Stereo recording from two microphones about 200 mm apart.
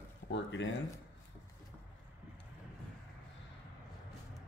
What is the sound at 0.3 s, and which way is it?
Speech, 65° left (ahead or behind).